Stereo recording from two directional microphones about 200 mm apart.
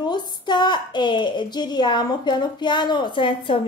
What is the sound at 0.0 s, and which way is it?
A woman's voice, 20° left (ahead or behind).